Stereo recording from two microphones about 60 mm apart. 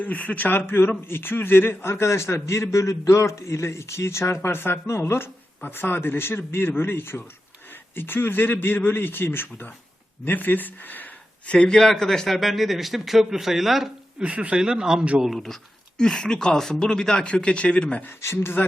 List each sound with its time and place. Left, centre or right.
0.0 s a man's voice: left
11.5 s a man's voice: centre
14.2 s speech: right
15.2 s a man's voice: centre
16.0 s speech: centre
18.2 s a man's voice: left